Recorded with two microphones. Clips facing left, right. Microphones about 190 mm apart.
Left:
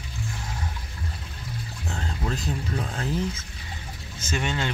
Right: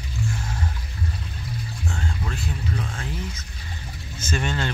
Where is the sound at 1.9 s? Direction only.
35° left (ahead or behind).